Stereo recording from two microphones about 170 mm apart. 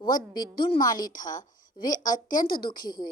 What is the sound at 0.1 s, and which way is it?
Speech, 60° left (ahead or behind).